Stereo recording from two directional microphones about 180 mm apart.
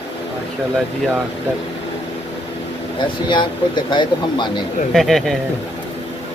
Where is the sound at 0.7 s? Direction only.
Centre (ahead or behind).